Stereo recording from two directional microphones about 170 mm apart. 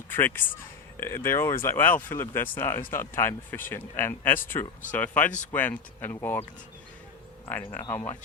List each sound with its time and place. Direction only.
0.1 s speech: 10° left (ahead or behind)
7.9 s speech: 10° left (ahead or behind)